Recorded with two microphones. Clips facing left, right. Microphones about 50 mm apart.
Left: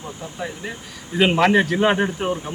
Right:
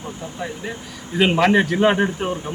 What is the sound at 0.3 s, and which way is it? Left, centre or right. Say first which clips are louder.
Speech: even; centre.